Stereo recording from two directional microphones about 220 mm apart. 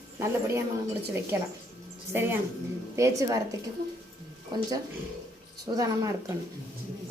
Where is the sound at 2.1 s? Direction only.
10° right (ahead or behind).